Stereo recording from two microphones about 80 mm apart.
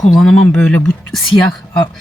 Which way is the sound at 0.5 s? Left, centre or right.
Centre.